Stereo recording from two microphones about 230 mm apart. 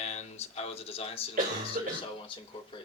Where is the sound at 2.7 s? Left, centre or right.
Left.